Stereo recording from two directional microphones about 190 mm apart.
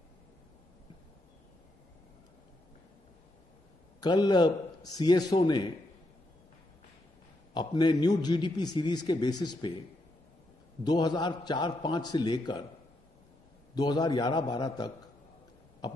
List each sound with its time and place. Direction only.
4.0 s a man's voice: 20° left (ahead or behind)
7.5 s a man's voice: 20° left (ahead or behind)
10.8 s a man's voice: 20° left (ahead or behind)
13.7 s a man's voice: 20° left (ahead or behind)